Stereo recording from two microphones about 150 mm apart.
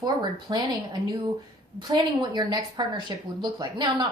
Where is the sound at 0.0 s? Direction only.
25° right (ahead or behind).